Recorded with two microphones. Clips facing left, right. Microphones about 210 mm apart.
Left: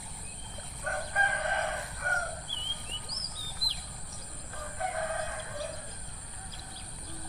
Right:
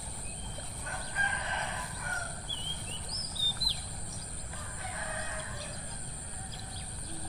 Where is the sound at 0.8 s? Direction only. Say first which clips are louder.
Left 8 dB; 55° left (ahead or behind).